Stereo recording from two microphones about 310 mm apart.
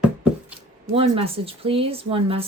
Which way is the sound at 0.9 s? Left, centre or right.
Centre.